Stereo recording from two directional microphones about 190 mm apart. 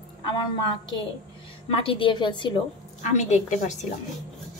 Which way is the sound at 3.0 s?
35° left (ahead or behind).